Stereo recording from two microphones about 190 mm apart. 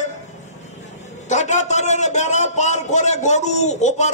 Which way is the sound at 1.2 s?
40° left (ahead or behind).